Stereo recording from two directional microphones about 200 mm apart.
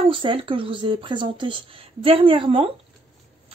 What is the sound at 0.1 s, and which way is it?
A woman's voice, 25° right (ahead or behind).